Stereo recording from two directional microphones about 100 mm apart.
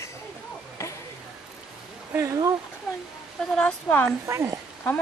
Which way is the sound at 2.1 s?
30° right (ahead or behind).